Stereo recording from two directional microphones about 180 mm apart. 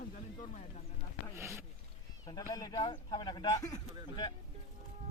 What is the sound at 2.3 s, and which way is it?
Speech, 20° left (ahead or behind).